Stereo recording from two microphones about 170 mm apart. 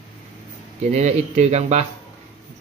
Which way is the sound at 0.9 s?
40° right (ahead or behind).